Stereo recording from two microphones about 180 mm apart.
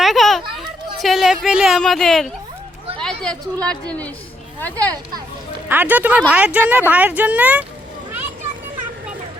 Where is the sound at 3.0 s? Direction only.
5° left (ahead or behind).